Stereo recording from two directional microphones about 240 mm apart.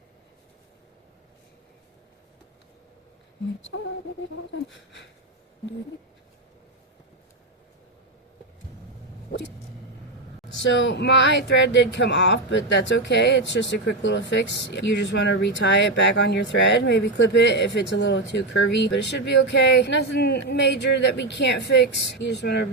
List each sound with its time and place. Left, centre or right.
10.6 s speech: left